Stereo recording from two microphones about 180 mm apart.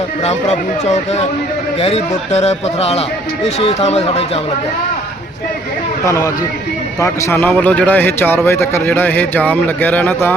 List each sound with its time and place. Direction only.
0.9 s a man's voice: 40° left (ahead or behind)
6.1 s a man's voice: 15° left (ahead or behind)